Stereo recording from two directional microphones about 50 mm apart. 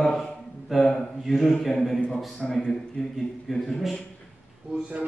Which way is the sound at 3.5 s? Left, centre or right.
Centre.